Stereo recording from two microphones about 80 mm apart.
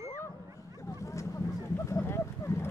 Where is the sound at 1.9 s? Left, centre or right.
Left.